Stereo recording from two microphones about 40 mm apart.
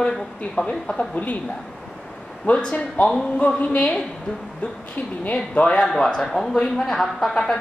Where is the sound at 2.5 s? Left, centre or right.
Left.